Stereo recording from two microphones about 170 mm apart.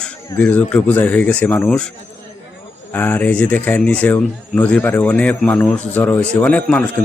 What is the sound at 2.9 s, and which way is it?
Speech, 10° left (ahead or behind).